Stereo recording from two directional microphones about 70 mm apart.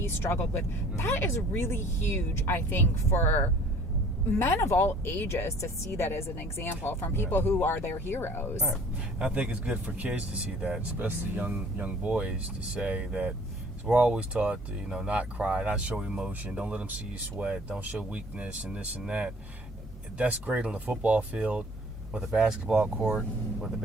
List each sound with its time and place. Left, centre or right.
0.0 s speech: left
9.1 s speech: centre
22.2 s speech: centre
23.1 s speech: centre